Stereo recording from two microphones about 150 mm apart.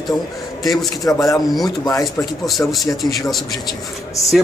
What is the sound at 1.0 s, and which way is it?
Speech, 20° left (ahead or behind).